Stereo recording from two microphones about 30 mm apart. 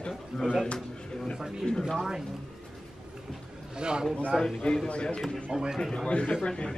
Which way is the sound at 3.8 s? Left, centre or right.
Right.